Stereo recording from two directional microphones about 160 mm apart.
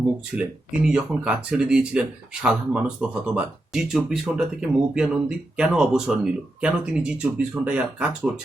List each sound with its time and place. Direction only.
0.3 s speech: 5° right (ahead or behind)